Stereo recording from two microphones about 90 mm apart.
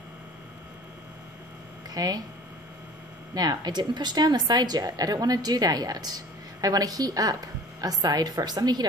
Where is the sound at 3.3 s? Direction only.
45° right (ahead or behind).